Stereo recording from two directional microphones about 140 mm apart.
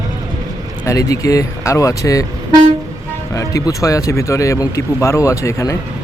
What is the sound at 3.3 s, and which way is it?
Speech, 20° left (ahead or behind).